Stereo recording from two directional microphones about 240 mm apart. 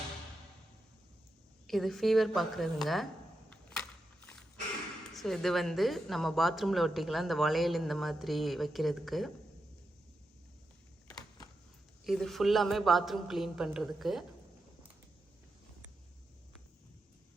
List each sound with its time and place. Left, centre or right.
1.6 s a woman's voice: centre
3.5 s a sound: centre
5.1 s a woman's voice: centre
12.0 s a woman's voice: centre